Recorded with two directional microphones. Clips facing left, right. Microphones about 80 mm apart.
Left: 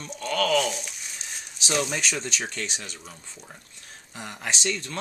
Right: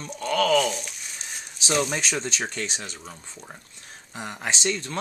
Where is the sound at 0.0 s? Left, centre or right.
Right.